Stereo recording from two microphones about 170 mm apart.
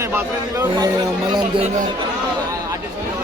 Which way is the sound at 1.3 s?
30° right (ahead or behind).